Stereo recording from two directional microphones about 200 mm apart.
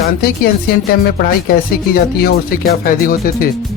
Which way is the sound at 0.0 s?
50° left (ahead or behind).